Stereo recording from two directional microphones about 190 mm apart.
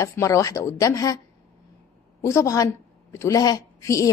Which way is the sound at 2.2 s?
15° left (ahead or behind).